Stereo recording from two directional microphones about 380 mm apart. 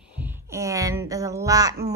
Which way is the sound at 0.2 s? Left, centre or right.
Centre.